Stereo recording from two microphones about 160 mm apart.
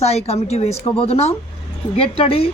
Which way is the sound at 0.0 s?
40° left (ahead or behind).